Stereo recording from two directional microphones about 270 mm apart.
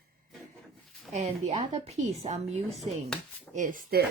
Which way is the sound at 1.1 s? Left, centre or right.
Right.